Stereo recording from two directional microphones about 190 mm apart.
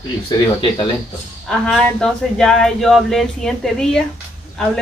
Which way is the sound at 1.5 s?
5° left (ahead or behind).